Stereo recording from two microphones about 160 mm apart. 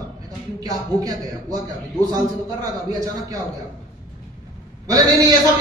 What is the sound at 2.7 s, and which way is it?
Speech, 25° right (ahead or behind).